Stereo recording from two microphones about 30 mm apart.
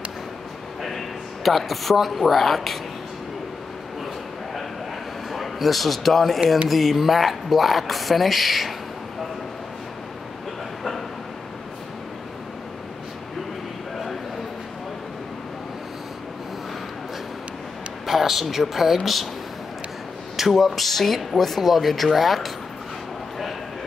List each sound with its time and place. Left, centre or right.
0.8 s speech: centre
5.3 s speech: centre
18.0 s a woman's voice: centre
20.3 s speech: centre